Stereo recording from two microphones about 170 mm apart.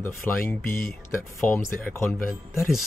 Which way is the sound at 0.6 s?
60° left (ahead or behind).